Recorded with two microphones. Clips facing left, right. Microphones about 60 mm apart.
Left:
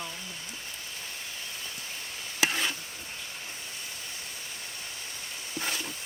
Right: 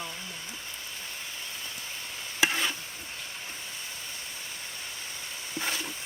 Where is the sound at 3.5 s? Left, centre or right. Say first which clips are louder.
Right 1 dB; right.